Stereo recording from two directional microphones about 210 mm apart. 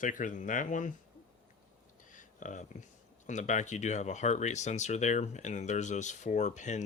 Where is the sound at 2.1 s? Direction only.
35° left (ahead or behind).